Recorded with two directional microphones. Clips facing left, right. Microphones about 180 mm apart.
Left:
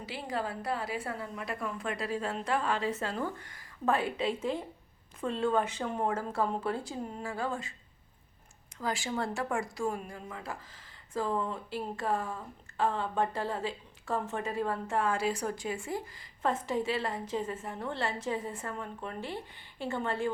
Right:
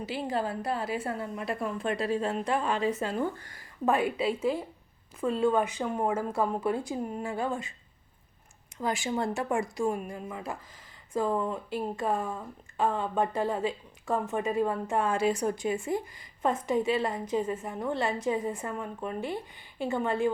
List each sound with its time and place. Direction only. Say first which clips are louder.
0.0 s a woman's voice: right 5 dB; 25° right (ahead or behind)
3.3 s speech: even; 35° right (ahead or behind)
3.8 s speech: right 3 dB; 15° right (ahead or behind)
8.8 s a woman's voice: right 4 dB; 20° right (ahead or behind)